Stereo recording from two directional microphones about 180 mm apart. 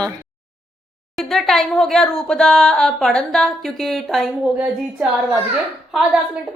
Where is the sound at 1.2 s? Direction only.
Centre (ahead or behind).